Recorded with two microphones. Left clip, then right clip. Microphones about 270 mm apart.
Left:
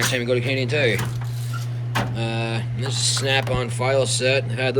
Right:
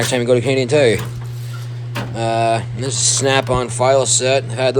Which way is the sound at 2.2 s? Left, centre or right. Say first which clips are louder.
Right 11 dB; centre.